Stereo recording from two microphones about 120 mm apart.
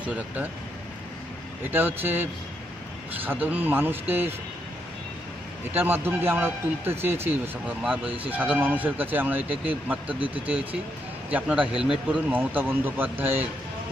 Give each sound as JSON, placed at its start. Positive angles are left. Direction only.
{"t": 0.0, "sound": "speech", "side_deg": -10}
{"t": 1.7, "sound": "speech", "side_deg": -15}
{"t": 5.7, "sound": "speech", "side_deg": -15}
{"t": 7.6, "sound": "speech", "side_deg": -10}